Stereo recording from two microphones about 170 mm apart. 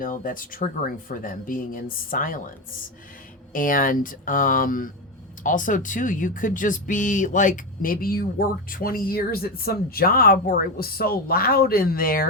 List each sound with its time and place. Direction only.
0.0 s speech: 55° left (ahead or behind)
3.5 s speech: 55° left (ahead or behind)